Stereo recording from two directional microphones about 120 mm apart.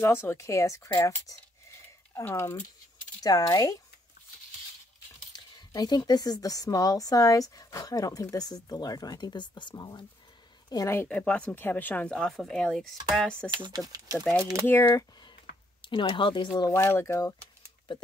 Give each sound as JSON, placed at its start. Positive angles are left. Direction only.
{"t": 0.0, "sound": "speech", "side_deg": 20}
{"t": 5.3, "sound": "speech", "side_deg": 35}
{"t": 11.0, "sound": "speech", "side_deg": 10}
{"t": 13.5, "sound": "speech", "side_deg": -40}
{"t": 14.7, "sound": "speech", "side_deg": 25}
{"t": 15.8, "sound": "speech", "side_deg": 45}
{"t": 16.7, "sound": "speech", "side_deg": 25}